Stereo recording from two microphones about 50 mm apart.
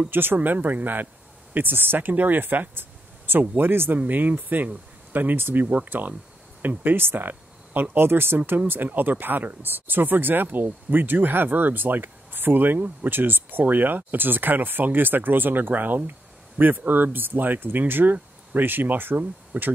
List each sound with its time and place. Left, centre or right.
0.1 s speech: right